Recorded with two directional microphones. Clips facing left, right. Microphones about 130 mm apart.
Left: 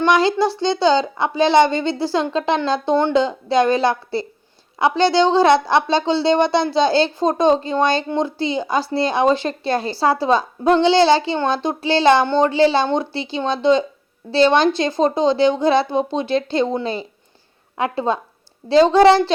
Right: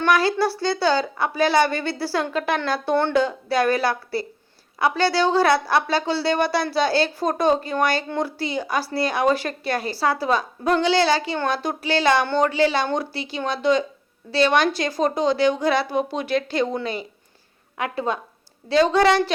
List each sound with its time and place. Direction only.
0.0 s a woman's voice: 20° left (ahead or behind)